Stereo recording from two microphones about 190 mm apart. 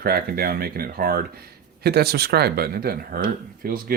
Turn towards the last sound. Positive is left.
turn(degrees=-50)  # may be behind; listen again after turning